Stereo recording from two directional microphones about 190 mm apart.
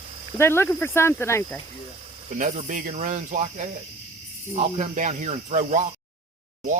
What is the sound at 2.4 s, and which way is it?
Speech, 40° right (ahead or behind).